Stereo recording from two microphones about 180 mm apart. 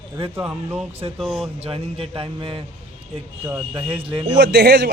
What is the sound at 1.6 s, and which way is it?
A man's voice, 30° right (ahead or behind).